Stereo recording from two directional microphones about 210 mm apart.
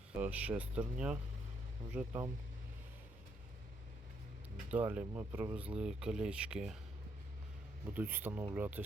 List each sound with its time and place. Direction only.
0.2 s speech: 5° right (ahead or behind)
4.7 s speech: 10° right (ahead or behind)
7.9 s speech: 10° right (ahead or behind)